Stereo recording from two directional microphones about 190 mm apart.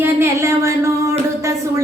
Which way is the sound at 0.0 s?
15° right (ahead or behind).